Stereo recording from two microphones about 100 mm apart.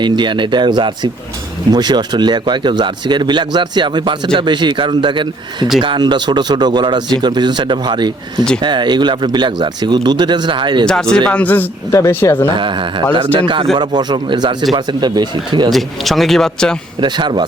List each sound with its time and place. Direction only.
0.0 s speech: 50° right (ahead or behind)
10.8 s speech: 5° left (ahead or behind)
11.9 s speech: 30° left (ahead or behind)
12.5 s speech: 55° right (ahead or behind)
15.7 s speech: centre (ahead or behind)
17.0 s speech: 50° right (ahead or behind)